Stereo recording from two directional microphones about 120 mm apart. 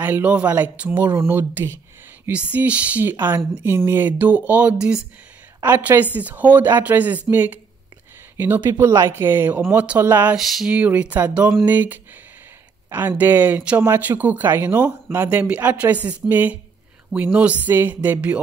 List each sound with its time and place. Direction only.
0.0 s speech: 15° right (ahead or behind)
8.8 s speech: 25° right (ahead or behind)
10.3 s a sound: 5° right (ahead or behind)
10.7 s speech: 15° right (ahead or behind)
13.2 s speech: 15° right (ahead or behind)